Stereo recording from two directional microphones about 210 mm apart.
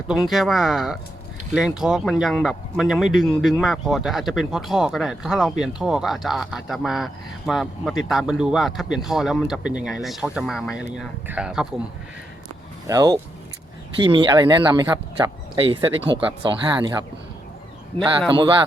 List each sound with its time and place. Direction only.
0.1 s speech: centre (ahead or behind)
12.9 s speech: 20° right (ahead or behind)
17.9 s speech: 5° left (ahead or behind)
18.3 s speech: 20° right (ahead or behind)